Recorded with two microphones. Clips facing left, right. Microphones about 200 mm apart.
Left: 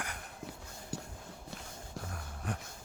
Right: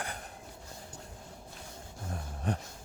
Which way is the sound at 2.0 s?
30° right (ahead or behind).